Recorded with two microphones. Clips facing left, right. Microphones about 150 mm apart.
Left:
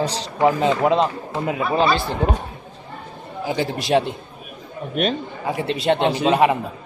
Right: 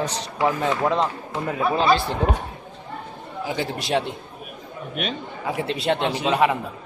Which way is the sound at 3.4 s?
Centre (ahead or behind).